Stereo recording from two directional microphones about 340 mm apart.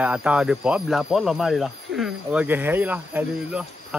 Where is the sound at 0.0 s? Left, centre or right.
Centre.